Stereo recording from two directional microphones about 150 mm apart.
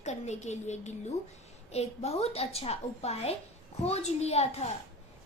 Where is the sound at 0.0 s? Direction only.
50° left (ahead or behind).